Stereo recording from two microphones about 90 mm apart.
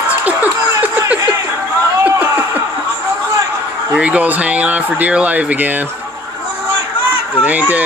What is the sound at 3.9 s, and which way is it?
Speech, 15° right (ahead or behind).